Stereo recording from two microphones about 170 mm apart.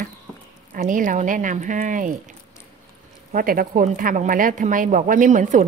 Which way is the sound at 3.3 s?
55° right (ahead or behind).